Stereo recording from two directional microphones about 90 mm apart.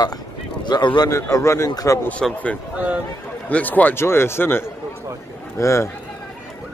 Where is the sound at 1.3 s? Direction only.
35° left (ahead or behind).